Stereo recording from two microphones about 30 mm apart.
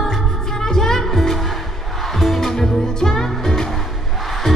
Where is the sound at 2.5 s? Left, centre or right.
Left.